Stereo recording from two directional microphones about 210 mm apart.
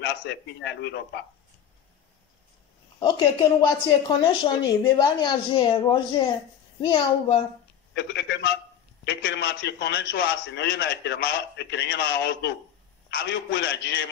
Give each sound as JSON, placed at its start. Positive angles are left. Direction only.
{"t": 0.0, "sound": "a man's voice", "side_deg": 55}
{"t": 3.0, "sound": "a woman's voice", "side_deg": 20}
{"t": 7.9, "sound": "a man's voice", "side_deg": 55}